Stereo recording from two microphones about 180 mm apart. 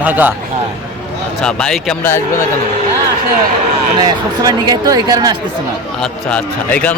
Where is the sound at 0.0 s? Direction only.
10° right (ahead or behind).